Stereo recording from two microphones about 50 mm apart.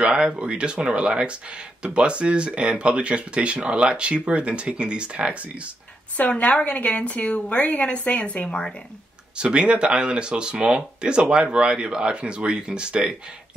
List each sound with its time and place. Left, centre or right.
0.0 s speech: right
6.1 s a woman's voice: left
9.4 s speech: centre